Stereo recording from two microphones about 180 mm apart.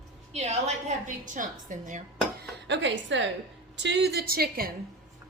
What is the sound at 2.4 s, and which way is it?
Speech, 80° right.